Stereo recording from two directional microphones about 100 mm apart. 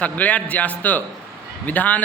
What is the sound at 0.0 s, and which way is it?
A man's voice, 15° left (ahead or behind).